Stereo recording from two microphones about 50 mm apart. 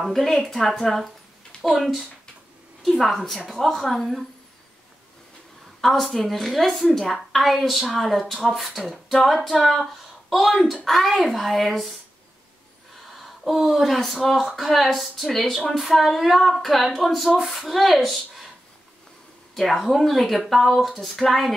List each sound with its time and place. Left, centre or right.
0.1 s a woman's voice: centre
5.8 s a woman's voice: centre
10.9 s a woman's voice: centre
13.0 s a woman's voice: centre
19.5 s a woman's voice: centre